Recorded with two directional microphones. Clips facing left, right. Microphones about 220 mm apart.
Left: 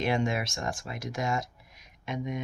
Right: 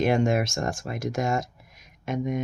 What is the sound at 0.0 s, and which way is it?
Speech, 45° right (ahead or behind).